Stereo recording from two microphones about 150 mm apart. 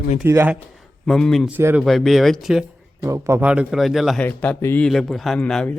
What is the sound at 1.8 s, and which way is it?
Speech, centre (ahead or behind).